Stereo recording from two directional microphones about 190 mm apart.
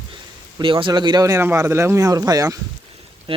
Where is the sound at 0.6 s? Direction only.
25° right (ahead or behind).